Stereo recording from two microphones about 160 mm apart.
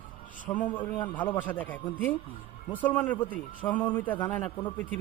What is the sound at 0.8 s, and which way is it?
Speech, 30° left (ahead or behind).